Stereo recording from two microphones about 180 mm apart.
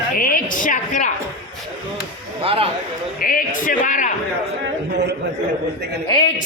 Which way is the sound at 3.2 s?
50° left (ahead or behind).